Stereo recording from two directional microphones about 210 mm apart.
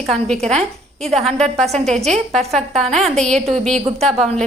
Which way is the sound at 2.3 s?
Centre (ahead or behind).